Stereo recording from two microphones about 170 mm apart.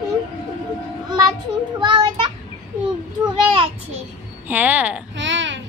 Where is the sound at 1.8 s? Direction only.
25° right (ahead or behind).